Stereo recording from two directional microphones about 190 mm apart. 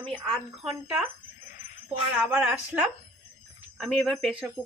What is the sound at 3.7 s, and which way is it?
Speech, centre (ahead or behind).